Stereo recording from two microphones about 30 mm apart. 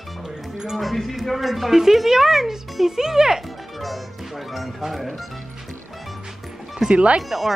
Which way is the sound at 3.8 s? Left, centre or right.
Centre.